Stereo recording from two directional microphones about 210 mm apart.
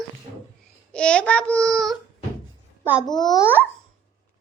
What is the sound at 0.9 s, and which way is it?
A child's voice, 5° left (ahead or behind).